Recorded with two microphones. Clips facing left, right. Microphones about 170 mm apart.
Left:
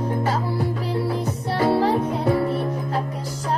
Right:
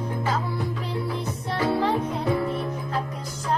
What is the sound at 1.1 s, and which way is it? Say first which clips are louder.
Music: left 4 dB; 40° left (ahead or behind).